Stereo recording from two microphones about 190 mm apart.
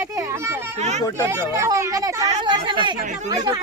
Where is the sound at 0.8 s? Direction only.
35° right (ahead or behind).